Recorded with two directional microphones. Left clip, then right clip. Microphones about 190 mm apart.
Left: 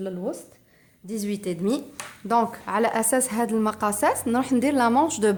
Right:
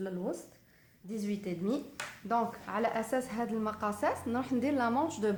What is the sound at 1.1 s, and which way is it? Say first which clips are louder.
A woman's voice: left 8 dB; 50° left (ahead or behind).